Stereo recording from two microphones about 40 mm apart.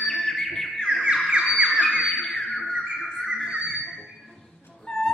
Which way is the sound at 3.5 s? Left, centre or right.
Right.